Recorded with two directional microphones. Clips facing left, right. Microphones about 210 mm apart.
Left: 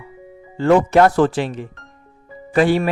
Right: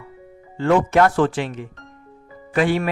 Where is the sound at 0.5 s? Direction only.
40° left (ahead or behind).